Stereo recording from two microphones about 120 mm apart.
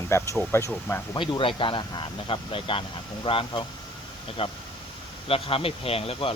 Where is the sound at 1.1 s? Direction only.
40° left (ahead or behind).